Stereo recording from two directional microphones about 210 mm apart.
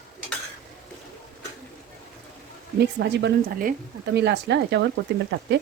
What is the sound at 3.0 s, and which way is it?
Speech, 50° right (ahead or behind).